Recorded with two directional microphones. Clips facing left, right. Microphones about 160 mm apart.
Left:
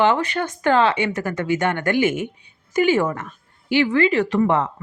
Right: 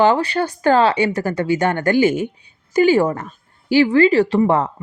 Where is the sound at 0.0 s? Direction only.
35° right (ahead or behind).